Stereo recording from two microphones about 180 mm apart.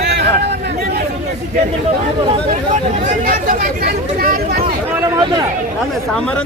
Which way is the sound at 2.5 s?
40° right (ahead or behind).